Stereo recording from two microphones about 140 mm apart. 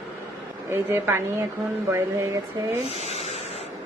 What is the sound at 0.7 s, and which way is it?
A woman's voice, 15° right (ahead or behind).